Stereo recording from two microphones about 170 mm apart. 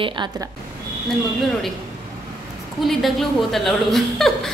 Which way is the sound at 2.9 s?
Centre (ahead or behind).